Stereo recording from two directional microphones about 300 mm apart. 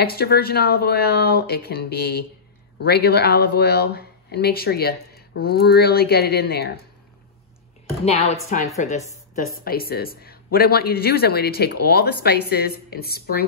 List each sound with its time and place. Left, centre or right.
0.0 s speech: left
8.0 s a woman's voice: left